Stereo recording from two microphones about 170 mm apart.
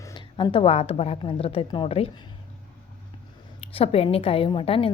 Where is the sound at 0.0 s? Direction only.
25° left (ahead or behind).